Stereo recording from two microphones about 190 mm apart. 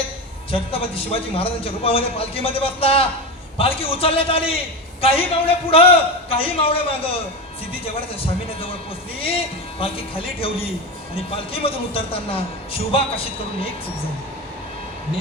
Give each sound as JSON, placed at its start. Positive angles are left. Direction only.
{"t": 0.5, "sound": "a man's voice", "side_deg": 30}
{"t": 8.2, "sound": "a man's voice", "side_deg": 30}
{"t": 9.8, "sound": "a man's voice", "side_deg": 30}